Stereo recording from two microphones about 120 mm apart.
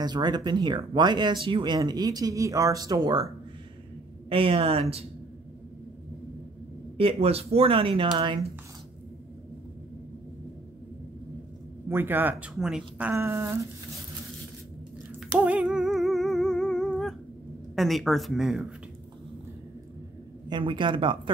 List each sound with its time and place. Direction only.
0.0 s speech: 35° right (ahead or behind)
4.3 s speech: 50° right (ahead or behind)
7.0 s speech: 55° right (ahead or behind)
11.9 s a man's voice: 15° right (ahead or behind)
12.5 s speech: 5° right (ahead or behind)
13.1 s speech: 25° right (ahead or behind)
15.3 s humming: 10° right (ahead or behind); by 17.1 s 5° left (ahead or behind)
17.7 s speech: centre (ahead or behind)
20.4 s speech: 40° right (ahead or behind)